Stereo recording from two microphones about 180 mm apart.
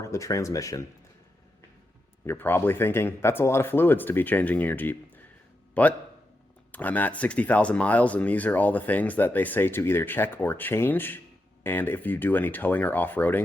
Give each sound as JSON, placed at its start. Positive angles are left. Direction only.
{"t": 0.0, "sound": "speech", "side_deg": 15}
{"t": 2.2, "sound": "speech", "side_deg": 10}